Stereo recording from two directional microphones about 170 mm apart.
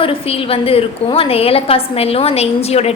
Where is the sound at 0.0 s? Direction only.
35° left (ahead or behind).